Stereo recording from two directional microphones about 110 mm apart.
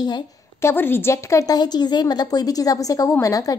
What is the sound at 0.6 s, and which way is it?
A woman's voice, 20° left (ahead or behind).